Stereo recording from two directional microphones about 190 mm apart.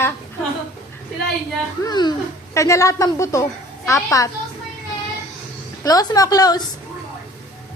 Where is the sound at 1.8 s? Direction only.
20° left (ahead or behind).